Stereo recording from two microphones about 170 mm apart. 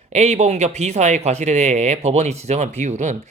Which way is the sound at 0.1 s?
40° right (ahead or behind).